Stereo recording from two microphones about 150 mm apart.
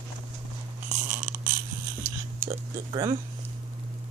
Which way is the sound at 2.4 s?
25° right (ahead or behind).